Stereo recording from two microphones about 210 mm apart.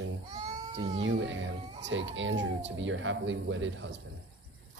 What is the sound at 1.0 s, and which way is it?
Speech, 60° right (ahead or behind).